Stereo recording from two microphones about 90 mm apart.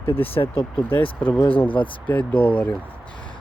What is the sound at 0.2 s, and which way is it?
Speech, 90° left.